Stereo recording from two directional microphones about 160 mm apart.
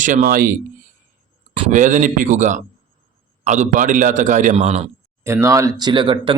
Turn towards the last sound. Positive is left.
turn(degrees=-30)  # may be behind; listen again after turning